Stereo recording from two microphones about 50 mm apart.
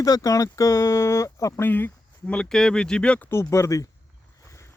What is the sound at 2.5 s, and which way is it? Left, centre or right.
Speech, centre.